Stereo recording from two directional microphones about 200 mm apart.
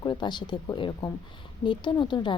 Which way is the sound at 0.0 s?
20° left (ahead or behind).